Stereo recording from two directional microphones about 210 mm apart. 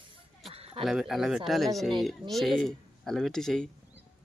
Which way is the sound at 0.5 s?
30° right (ahead or behind).